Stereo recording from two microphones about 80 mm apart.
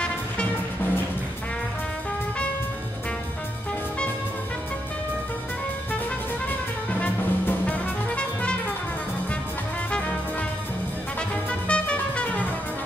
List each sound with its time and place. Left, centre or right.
6.9 s music: centre
9.8 s music: centre
11.1 s music: centre